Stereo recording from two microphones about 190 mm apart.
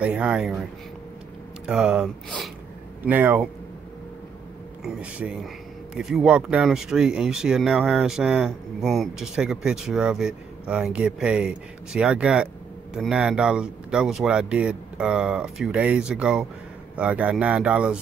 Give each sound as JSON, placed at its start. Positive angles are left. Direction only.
{"t": 0.0, "sound": "speech", "side_deg": -5}
{"t": 1.7, "sound": "speech", "side_deg": -5}
{"t": 3.1, "sound": "speech", "side_deg": -10}
{"t": 4.8, "sound": "speech", "side_deg": -5}